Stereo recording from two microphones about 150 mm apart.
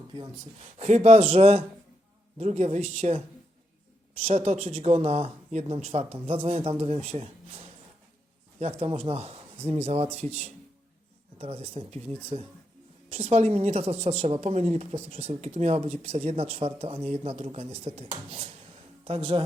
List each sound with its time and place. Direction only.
0.8 s speech: 45° right (ahead or behind)
4.2 s speech: 45° right (ahead or behind)
8.8 s speech: 40° right (ahead or behind)
11.3 s speech: 40° right (ahead or behind)